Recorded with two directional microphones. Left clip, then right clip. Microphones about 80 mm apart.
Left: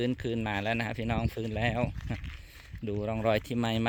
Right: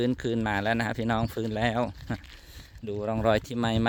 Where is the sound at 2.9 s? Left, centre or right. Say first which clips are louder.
Right 3 dB; right.